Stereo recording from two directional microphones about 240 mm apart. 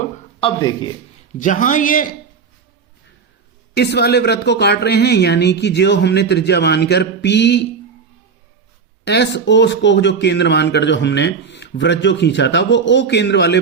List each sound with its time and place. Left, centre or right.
0.3 s speech: left
1.4 s a man's voice: left
3.8 s a man's voice: left
9.0 s a man's voice: left